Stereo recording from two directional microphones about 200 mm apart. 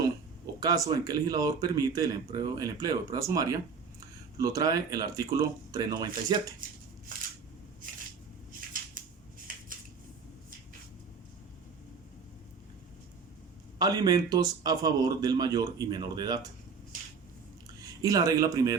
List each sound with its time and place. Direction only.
0.6 s speech: 15° right (ahead or behind)
9.0 s scissors: 40° right (ahead or behind)
13.7 s speech: 20° right (ahead or behind)
17.7 s speech: 15° right (ahead or behind)